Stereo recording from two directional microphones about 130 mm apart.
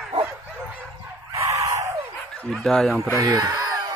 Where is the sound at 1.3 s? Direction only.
25° right (ahead or behind).